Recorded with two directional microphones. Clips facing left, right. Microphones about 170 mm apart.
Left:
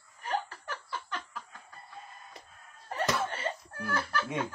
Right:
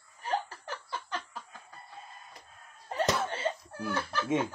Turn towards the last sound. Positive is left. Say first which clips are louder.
# right 3 dB
turn(degrees=-25)  # may be behind; listen again after turning